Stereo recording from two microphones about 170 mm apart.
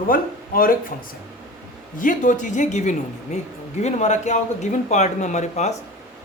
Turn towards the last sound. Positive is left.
turn(degrees=40)  # may be behind; listen again after turning